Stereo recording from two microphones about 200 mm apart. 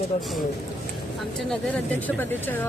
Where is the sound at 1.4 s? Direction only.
5° left (ahead or behind).